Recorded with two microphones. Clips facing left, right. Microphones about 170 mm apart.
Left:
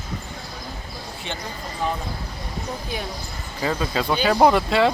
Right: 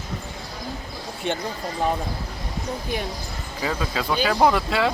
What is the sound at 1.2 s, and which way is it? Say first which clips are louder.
Speech: right 7 dB; 50° right (ahead or behind).